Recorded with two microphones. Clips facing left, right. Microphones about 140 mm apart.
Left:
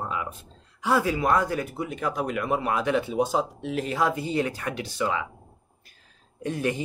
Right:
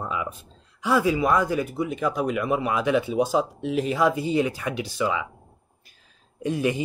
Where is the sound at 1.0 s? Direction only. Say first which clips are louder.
Right 3 dB; 10° right (ahead or behind).